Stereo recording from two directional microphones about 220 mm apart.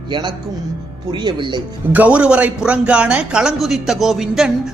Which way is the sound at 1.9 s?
5° right (ahead or behind).